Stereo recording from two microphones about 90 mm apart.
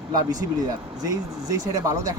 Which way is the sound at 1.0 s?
45° right (ahead or behind).